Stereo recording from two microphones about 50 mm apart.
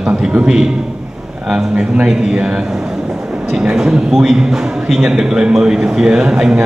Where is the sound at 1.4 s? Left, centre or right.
Centre.